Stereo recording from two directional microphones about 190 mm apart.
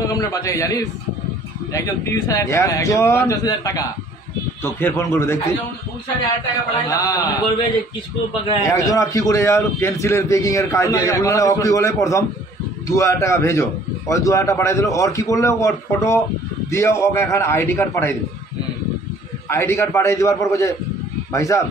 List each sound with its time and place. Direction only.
0.0 s a man's voice: 15° left (ahead or behind)
6.9 s a man's voice: 20° left (ahead or behind)
8.5 s a man's voice: 15° left (ahead or behind)
19.5 s a man's voice: 15° left (ahead or behind)